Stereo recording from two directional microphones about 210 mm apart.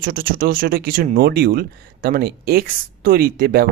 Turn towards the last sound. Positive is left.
turn(degrees=-45)  # may be behind; listen again after turning